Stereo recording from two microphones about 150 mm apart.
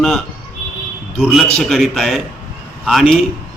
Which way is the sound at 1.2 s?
Centre (ahead or behind).